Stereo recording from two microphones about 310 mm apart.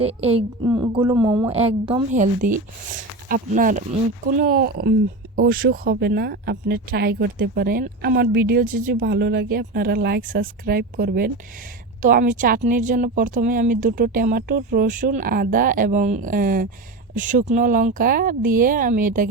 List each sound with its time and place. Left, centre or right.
0.0 s a woman's voice: centre